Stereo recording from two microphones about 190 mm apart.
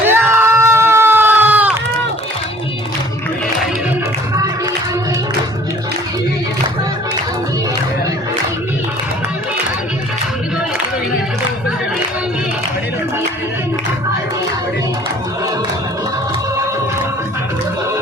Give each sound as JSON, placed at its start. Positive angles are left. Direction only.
{"t": 0.0, "sound": "crowd", "side_deg": -10}